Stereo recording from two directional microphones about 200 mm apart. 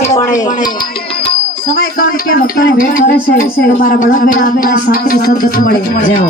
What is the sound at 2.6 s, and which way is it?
Speech, 50° left (ahead or behind).